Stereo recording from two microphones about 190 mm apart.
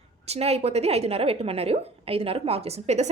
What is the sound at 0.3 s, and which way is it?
A woman's voice, 35° right (ahead or behind).